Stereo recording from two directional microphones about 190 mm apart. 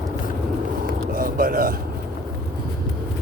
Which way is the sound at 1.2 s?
50° right (ahead or behind).